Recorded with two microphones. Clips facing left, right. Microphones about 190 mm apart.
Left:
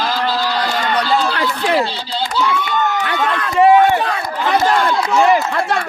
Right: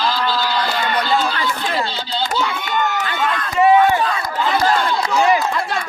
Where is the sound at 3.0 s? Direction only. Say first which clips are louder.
Left 3 dB; 60° left (ahead or behind).